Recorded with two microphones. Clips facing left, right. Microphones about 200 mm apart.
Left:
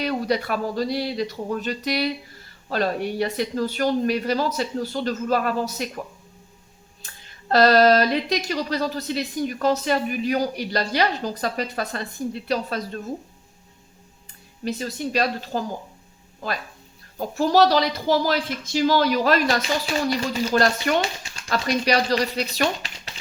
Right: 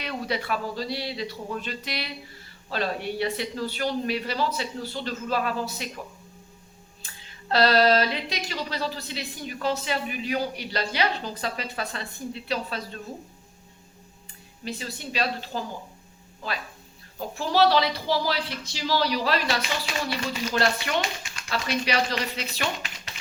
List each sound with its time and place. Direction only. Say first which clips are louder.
0.0 s speech: left 7 dB; 40° left (ahead or behind)
7.0 s speech: left 1 dB; 45° left (ahead or behind)
14.6 s speech: left 7 dB; 45° left (ahead or behind)
17.2 s speech: left 5 dB; 45° left (ahead or behind)